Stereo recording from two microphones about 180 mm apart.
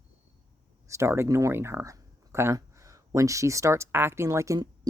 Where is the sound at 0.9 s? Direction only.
15° right (ahead or behind).